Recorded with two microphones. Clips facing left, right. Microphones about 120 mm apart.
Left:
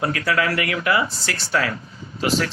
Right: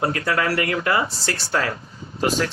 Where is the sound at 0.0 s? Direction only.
30° right (ahead or behind).